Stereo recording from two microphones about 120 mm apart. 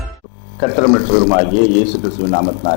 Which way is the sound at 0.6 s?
20° left (ahead or behind).